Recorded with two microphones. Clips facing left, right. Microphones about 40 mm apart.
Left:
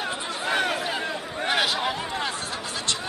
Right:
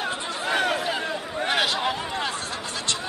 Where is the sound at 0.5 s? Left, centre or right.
Centre.